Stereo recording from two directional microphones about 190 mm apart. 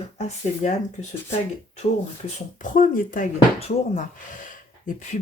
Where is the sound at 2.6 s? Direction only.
45° left (ahead or behind).